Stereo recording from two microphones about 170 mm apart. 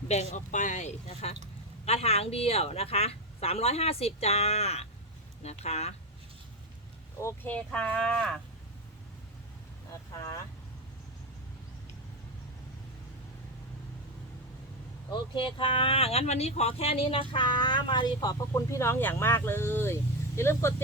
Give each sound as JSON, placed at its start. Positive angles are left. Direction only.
{"t": 0.1, "sound": "speech", "side_deg": 40}
{"t": 7.2, "sound": "speech", "side_deg": 15}
{"t": 15.1, "sound": "speech", "side_deg": 30}